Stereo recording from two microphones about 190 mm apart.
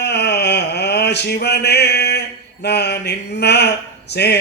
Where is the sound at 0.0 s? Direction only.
60° left (ahead or behind).